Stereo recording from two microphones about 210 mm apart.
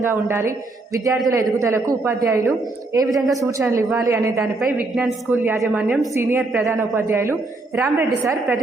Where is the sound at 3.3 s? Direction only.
15° right (ahead or behind).